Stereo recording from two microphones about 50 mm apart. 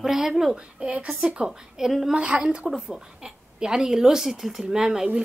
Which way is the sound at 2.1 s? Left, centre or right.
Centre.